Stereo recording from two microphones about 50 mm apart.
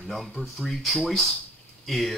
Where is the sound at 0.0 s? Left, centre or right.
Centre.